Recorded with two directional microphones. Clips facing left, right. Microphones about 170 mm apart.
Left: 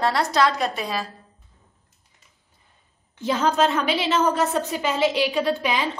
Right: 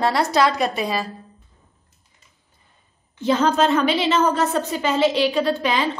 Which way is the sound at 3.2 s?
5° left (ahead or behind).